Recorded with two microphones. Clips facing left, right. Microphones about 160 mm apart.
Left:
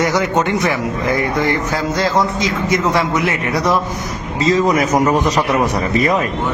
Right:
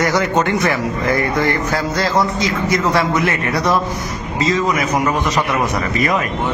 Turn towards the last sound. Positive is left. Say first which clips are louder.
# left 3 dB
turn(degrees=40)  # may be behind; listen again after turning